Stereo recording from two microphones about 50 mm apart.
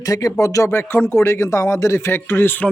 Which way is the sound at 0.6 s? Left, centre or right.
Left.